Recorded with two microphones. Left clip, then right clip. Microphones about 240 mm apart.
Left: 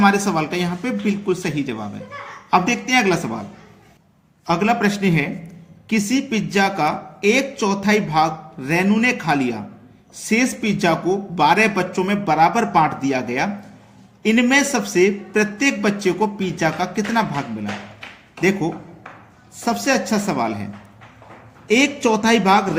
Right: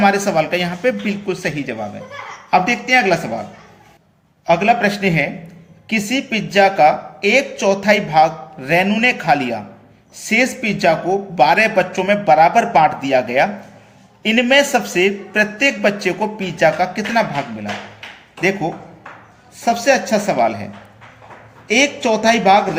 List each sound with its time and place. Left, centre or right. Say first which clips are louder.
0.0 s a woman's voice: right 3 dB; left
4.4 s a woman's voice: right 5 dB; left
21.7 s a woman's voice: right 2 dB; left